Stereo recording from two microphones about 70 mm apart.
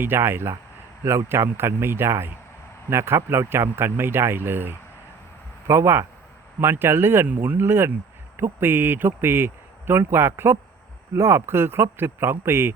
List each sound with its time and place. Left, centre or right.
0.0 s speech: right
7.3 s speech: right
7.6 s speech: right